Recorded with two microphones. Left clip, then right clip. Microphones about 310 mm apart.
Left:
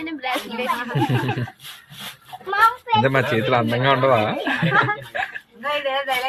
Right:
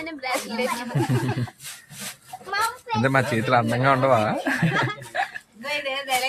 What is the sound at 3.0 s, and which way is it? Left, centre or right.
A man's voice, centre.